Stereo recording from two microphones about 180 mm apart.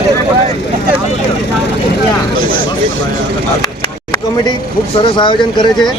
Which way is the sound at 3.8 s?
25° left (ahead or behind).